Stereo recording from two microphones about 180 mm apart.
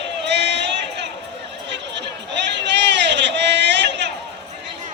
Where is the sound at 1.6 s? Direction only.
75° right (ahead or behind).